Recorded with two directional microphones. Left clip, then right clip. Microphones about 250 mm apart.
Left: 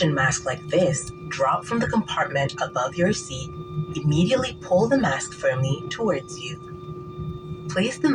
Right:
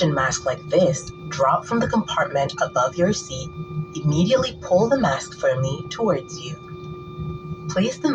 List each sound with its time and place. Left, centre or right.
0.0 s speech: left
4.1 s speech: left